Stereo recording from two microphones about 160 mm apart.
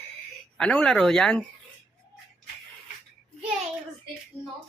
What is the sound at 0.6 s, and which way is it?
Speech, 5° left (ahead or behind).